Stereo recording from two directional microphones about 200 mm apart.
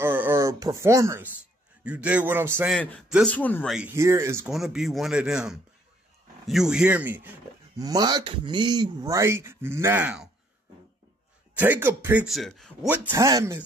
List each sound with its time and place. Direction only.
0.0 s a sound: 10° right (ahead or behind)
1.9 s speech: 5° right (ahead or behind)
3.7 s speech: 10° right (ahead or behind)
4.5 s speech: centre (ahead or behind)
7.8 s speech: 20° right (ahead or behind)
11.5 s speech: 10° right (ahead or behind)
12.9 s speech: 10° right (ahead or behind)